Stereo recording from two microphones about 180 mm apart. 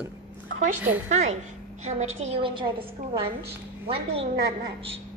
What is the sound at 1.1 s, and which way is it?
A woman's voice, 40° right (ahead or behind).